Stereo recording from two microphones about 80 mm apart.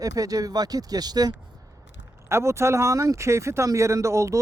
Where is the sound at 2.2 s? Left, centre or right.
Right.